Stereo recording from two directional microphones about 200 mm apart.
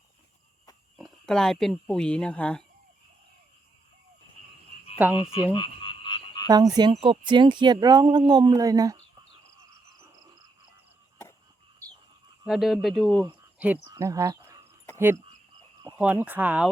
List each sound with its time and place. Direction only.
0.9 s speech: centre (ahead or behind)
5.0 s speech: 10° right (ahead or behind)
5.5 s frog: 25° left (ahead or behind)
6.5 s speech: 20° right (ahead or behind)
11.8 s a sound: 15° right (ahead or behind)
12.5 s speech: centre (ahead or behind)
13.2 s a sound: 5° right (ahead or behind)
13.9 s speech: 15° right (ahead or behind)